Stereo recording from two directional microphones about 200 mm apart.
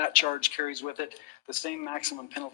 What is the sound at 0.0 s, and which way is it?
Speech, 40° left (ahead or behind).